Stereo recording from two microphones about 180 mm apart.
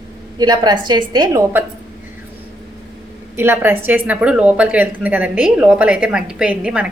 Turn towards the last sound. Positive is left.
turn(degrees=-5)  # may be behind; listen again after turning